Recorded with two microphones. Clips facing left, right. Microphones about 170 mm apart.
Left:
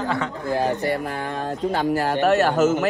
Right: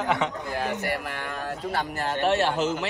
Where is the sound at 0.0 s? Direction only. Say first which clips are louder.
Left 1 dB; 20° right (ahead or behind).